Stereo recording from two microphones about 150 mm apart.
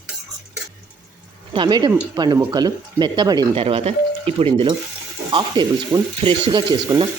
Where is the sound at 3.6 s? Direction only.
35° right (ahead or behind).